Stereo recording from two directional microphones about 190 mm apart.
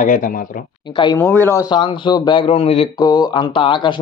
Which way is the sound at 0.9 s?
25° left (ahead or behind).